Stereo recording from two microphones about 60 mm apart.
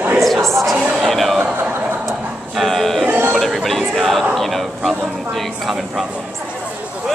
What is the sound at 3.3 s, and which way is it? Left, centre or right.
Music, centre.